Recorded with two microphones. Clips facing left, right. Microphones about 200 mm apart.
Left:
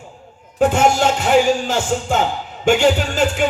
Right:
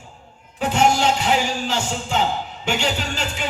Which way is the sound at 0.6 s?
50° left (ahead or behind).